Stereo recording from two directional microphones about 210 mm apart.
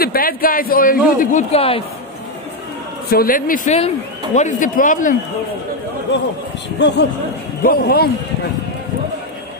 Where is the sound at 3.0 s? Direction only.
45° left (ahead or behind).